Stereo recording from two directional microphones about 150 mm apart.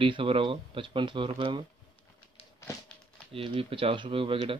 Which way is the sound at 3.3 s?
40° right (ahead or behind).